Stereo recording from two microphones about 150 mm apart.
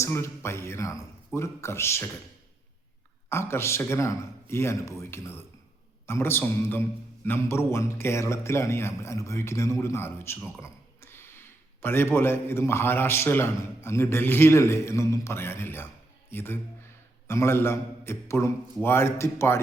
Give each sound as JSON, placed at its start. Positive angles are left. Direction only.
{"t": 0.0, "sound": "speech", "side_deg": 15}
{"t": 3.2, "sound": "a man's voice", "side_deg": 15}